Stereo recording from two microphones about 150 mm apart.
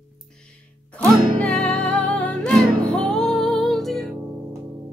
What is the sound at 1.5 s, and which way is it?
Music, 5° left (ahead or behind).